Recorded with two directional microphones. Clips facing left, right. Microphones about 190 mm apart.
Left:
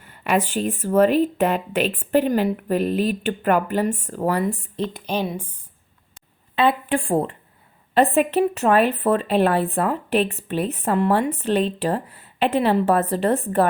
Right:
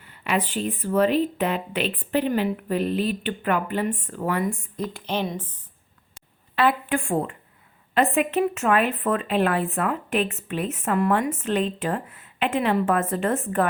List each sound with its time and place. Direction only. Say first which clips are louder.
0.0 s speech: left 4 dB; 45° left (ahead or behind)
4.9 s a woman's voice: even; 10° left (ahead or behind)
6.6 s speech: left 2 dB; 25° left (ahead or behind)